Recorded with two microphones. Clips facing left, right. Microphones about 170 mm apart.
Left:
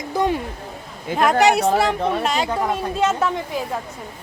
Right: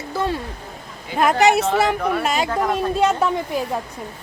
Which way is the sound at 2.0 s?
25° left (ahead or behind).